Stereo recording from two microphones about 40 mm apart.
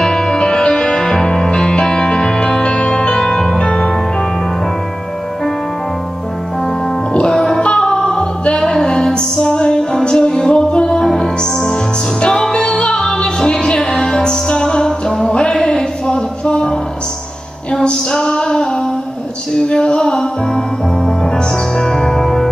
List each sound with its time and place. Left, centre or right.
0.0 s music: centre
3.2 s music: centre
7.2 s music: centre
15.5 s a sound: centre
18.1 s music: left
21.7 s music: centre